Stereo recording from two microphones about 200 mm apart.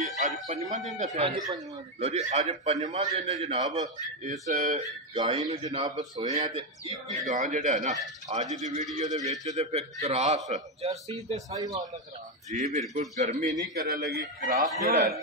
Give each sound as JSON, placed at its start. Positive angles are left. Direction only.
{"t": 0.0, "sound": "a man's voice", "side_deg": -40}
{"t": 3.6, "sound": "a man's voice", "side_deg": -20}
{"t": 4.2, "sound": "a man's voice", "side_deg": -35}
{"t": 5.1, "sound": "a man's voice", "side_deg": -20}
{"t": 7.2, "sound": "a man's voice", "side_deg": -40}
{"t": 11.5, "sound": "a man's voice", "side_deg": -15}
{"t": 12.5, "sound": "a man's voice", "side_deg": -35}
{"t": 13.7, "sound": "a man's voice", "side_deg": -55}